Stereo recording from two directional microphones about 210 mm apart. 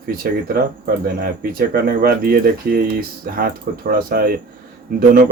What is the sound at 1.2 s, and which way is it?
Speech, 45° right (ahead or behind).